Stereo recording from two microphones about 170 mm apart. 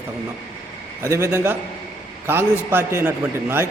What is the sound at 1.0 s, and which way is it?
A man's voice, 15° right (ahead or behind).